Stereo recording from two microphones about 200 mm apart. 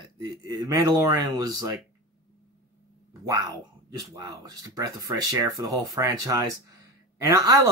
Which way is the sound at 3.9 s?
20° right (ahead or behind).